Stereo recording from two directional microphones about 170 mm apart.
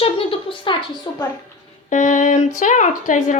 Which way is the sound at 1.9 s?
50° left (ahead or behind).